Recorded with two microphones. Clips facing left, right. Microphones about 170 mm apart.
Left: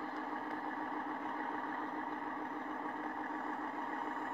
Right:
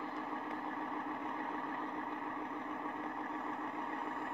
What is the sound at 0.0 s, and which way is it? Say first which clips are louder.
Vehicle: even; 40° left (ahead or behind).